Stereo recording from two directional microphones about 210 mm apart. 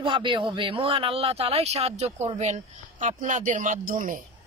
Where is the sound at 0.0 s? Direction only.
25° right (ahead or behind).